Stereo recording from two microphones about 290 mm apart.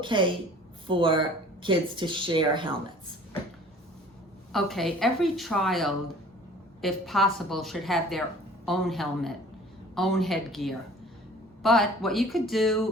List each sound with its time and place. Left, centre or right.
0.0 s speech: centre
4.5 s a woman's voice: centre